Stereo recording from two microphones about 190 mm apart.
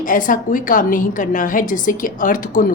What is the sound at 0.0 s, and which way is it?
A woman's voice, 45° left (ahead or behind).